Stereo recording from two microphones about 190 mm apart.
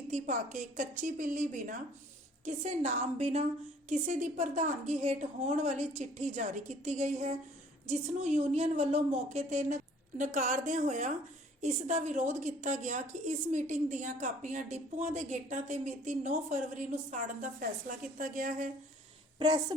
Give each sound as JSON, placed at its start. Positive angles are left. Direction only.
{"t": 0.1, "sound": "a woman's voice", "side_deg": -40}
{"t": 19.4, "sound": "a woman's voice", "side_deg": -25}